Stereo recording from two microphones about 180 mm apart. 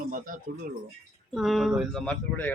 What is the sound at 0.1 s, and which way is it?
Speech, 50° right (ahead or behind).